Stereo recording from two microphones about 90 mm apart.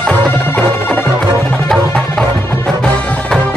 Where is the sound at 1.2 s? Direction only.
5° left (ahead or behind).